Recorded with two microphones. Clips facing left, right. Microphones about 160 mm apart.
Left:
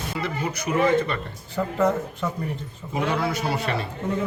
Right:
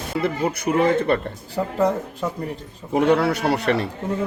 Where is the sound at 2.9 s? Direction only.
70° right (ahead or behind).